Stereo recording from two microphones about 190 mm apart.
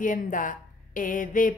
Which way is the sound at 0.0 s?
45° left (ahead or behind).